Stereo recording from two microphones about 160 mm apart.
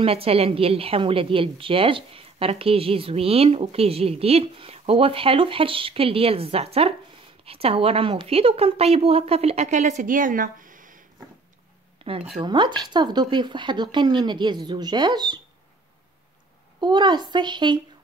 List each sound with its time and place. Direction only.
0.0 s a woman's voice: 35° right (ahead or behind); by 11.0 s 55° right (ahead or behind)
12.0 s speech: 35° right (ahead or behind)
16.8 s speech: 30° right (ahead or behind)